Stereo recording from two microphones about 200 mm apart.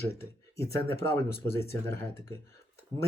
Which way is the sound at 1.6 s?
50° left (ahead or behind).